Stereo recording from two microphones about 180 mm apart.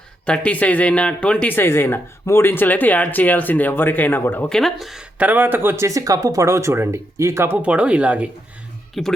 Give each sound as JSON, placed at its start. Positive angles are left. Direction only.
{"t": 0.3, "sound": "speech", "side_deg": 5}